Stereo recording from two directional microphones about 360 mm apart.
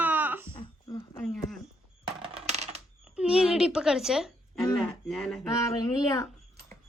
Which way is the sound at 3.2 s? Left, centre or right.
Centre.